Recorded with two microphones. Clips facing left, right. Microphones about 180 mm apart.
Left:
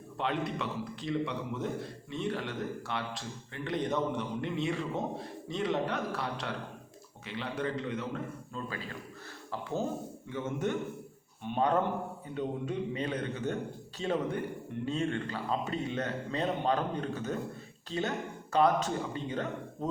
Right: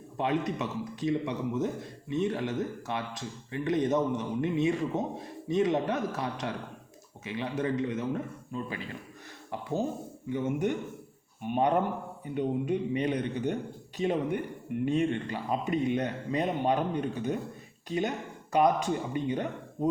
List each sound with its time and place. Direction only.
0.2 s speech: 20° right (ahead or behind)
10.3 s a man's voice: 15° right (ahead or behind)